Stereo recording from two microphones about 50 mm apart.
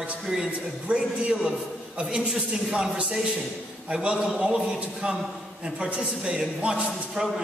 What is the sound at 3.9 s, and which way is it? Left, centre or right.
A man's voice, right.